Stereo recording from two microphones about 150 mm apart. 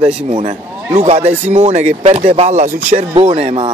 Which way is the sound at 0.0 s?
50° right (ahead or behind).